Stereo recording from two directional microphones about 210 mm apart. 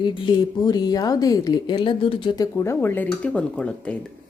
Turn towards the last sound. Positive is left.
turn(degrees=5)  # may be behind; listen again after turning